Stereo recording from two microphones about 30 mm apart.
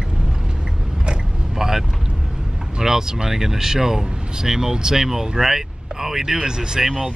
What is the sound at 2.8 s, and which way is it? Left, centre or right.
Speech, centre.